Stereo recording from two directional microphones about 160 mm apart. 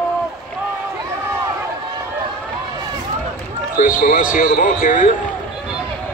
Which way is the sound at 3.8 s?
55° left (ahead or behind).